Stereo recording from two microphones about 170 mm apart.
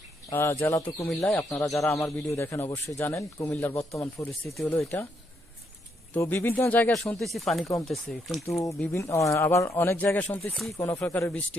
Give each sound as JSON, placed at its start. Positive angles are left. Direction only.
{"t": 0.3, "sound": "speech", "side_deg": 15}
{"t": 1.3, "sound": "speech", "side_deg": 5}
{"t": 1.9, "sound": "speech", "side_deg": 20}
{"t": 4.4, "sound": "speech", "side_deg": 5}
{"t": 4.8, "sound": "speech", "side_deg": 15}
{"t": 6.1, "sound": "speech", "side_deg": 10}
{"t": 8.8, "sound": "speech", "side_deg": 15}